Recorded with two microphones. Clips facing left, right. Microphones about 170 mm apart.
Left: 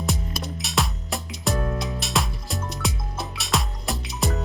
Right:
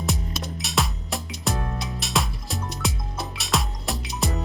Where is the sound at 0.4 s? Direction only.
Centre (ahead or behind).